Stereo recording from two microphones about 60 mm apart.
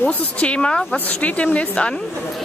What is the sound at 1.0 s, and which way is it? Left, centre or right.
Speech, left.